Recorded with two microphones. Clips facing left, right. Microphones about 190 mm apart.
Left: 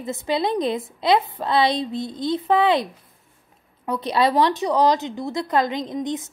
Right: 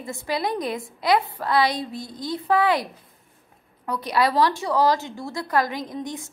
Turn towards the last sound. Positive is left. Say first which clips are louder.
# left 5 dB
turn(degrees=20)  # may be behind; listen again after turning